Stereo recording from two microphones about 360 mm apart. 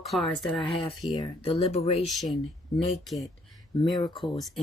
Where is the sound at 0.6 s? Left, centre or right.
Centre.